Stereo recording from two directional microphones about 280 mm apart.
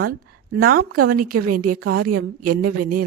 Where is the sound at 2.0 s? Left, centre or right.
Right.